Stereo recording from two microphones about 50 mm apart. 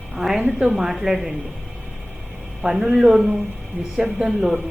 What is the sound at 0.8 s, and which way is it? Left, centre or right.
Speech, centre.